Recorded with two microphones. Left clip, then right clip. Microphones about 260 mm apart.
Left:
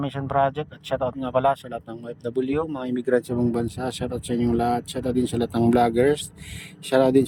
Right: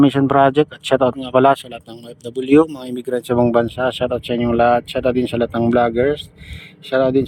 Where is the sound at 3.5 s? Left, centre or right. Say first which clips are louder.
Right 11 dB; centre.